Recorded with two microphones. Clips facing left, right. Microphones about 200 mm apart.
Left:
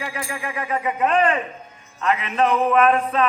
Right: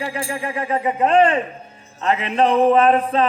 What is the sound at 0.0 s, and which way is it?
Music, 30° right (ahead or behind).